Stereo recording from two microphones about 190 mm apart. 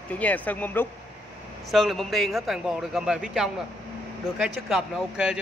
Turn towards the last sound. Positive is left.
turn(degrees=-5)  # may be behind; listen again after turning